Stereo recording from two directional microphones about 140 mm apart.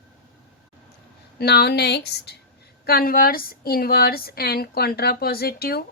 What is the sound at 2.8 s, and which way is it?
A woman's voice, 90° left.